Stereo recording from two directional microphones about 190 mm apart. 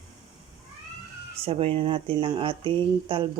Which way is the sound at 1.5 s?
30° right (ahead or behind).